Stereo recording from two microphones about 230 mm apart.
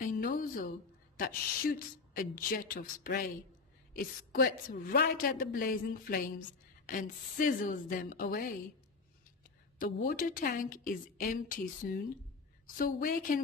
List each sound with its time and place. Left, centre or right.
0.0 s a sound: left
1.1 s a woman's voice: left
9.9 s a woman's voice: left